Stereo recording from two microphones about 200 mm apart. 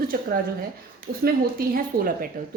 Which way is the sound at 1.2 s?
45° right (ahead or behind).